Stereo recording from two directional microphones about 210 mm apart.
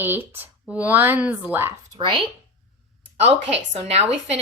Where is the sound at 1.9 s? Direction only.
25° right (ahead or behind).